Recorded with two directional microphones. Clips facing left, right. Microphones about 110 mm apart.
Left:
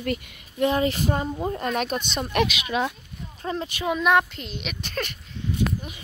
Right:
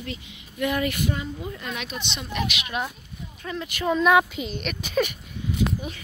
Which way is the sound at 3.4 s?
35° left (ahead or behind).